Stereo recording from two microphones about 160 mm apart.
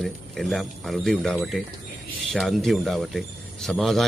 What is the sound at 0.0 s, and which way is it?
Speech, centre (ahead or behind).